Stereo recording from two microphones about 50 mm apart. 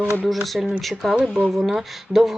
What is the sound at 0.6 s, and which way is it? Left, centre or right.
Speech, centre.